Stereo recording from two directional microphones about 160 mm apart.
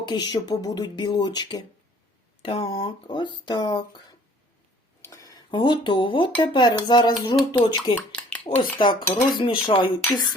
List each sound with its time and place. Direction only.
0.0 s speech: 30° left (ahead or behind)
5.0 s speech: 20° left (ahead or behind)
7.9 s a sound: 10° left (ahead or behind)
8.4 s speech: 30° left (ahead or behind)